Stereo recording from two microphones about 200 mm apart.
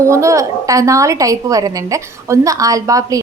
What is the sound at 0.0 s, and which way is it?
A woman's voice, 15° right (ahead or behind).